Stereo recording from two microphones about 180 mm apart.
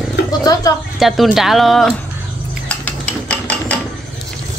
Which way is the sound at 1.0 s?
Centre (ahead or behind).